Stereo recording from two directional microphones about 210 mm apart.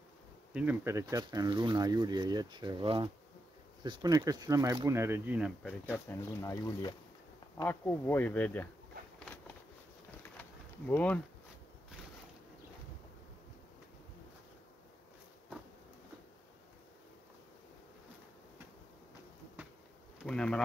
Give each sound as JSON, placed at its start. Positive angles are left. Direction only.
{"t": 0.5, "sound": "speech", "side_deg": -5}
{"t": 5.6, "sound": "speech", "side_deg": 10}
{"t": 10.9, "sound": "speech", "side_deg": 5}
{"t": 20.2, "sound": "speech", "side_deg": 5}